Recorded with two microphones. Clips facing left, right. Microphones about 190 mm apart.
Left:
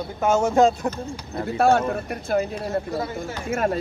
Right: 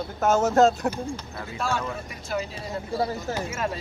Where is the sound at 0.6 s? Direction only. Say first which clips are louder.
Even; centre (ahead or behind).